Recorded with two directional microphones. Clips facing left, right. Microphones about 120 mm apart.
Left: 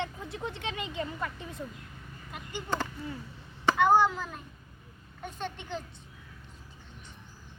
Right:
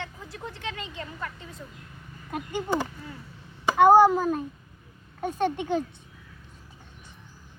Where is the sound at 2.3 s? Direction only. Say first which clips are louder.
Right 9 dB; 50° right (ahead or behind).